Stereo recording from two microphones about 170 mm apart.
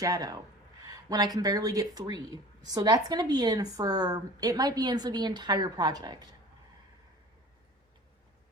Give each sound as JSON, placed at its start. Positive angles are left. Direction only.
{"t": 0.0, "sound": "speech", "side_deg": -20}